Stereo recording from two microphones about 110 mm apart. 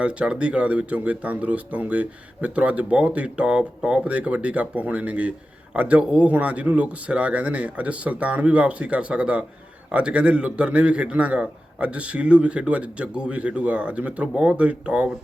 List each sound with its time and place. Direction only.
0.0 s speech: 10° right (ahead or behind)